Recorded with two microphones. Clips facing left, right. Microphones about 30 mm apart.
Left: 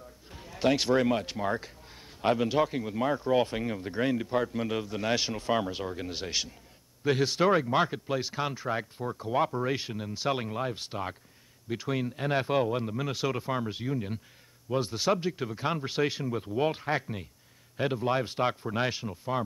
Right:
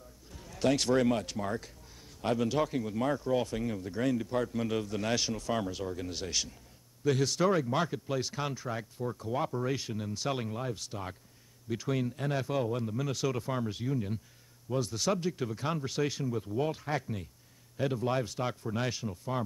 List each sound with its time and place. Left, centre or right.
0.3 s speech: left
8.6 s speech: left
11.7 s speech: centre
12.3 s speech: left